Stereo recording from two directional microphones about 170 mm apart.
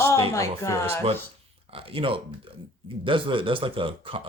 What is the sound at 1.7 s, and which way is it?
Speech, 30° right (ahead or behind).